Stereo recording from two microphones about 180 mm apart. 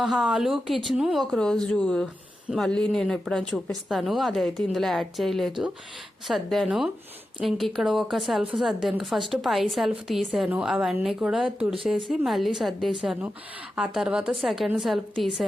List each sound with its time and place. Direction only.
0.0 s a woman's voice: centre (ahead or behind)